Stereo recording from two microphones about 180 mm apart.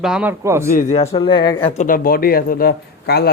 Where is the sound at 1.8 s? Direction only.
50° left (ahead or behind).